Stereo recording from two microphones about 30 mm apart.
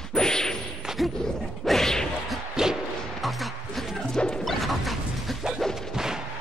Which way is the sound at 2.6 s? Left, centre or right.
Centre.